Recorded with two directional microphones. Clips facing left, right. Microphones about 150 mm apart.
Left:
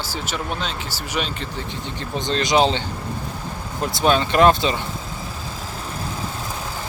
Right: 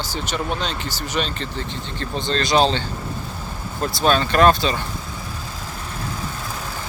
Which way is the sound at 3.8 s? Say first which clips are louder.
Even; 15° left (ahead or behind).